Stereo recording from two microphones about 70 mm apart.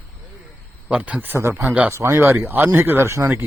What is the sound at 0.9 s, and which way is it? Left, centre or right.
Speech, centre.